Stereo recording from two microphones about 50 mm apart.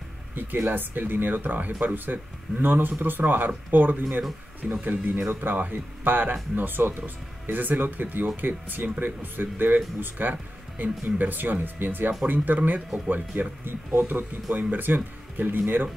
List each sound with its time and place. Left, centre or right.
0.4 s speech: right